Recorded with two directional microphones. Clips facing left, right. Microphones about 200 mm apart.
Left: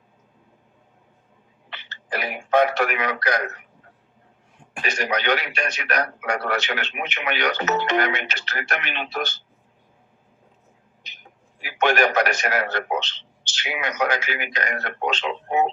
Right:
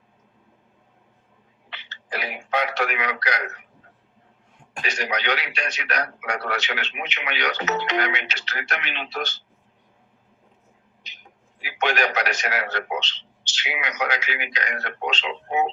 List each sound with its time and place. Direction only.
1.7 s radio: 50° left (ahead or behind)
4.8 s speech: 50° left (ahead or behind)
11.6 s speech: 50° left (ahead or behind)